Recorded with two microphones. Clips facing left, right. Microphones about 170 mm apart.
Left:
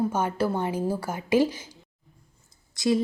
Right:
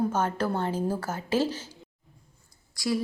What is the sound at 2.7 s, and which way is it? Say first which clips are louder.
Speech: left 5 dB; 20° left (ahead or behind).